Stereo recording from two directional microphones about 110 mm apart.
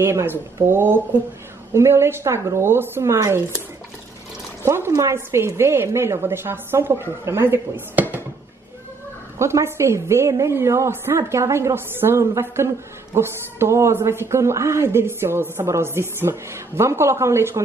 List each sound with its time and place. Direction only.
0.0 s a woman's voice: 25° right (ahead or behind)
4.6 s a woman's voice: 25° right (ahead or behind)
9.4 s a woman's voice: 25° right (ahead or behind)